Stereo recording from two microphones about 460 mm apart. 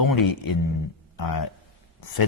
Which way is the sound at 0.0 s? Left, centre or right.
Left.